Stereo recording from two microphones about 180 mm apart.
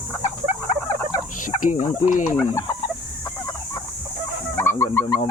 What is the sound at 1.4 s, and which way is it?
Turkey, 45° left (ahead or behind).